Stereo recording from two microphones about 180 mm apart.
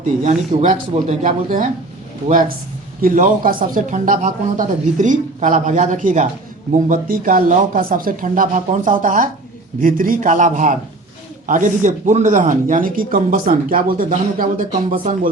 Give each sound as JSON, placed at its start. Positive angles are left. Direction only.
{"t": 0.0, "sound": "speech", "side_deg": -45}
{"t": 3.0, "sound": "speech", "side_deg": -50}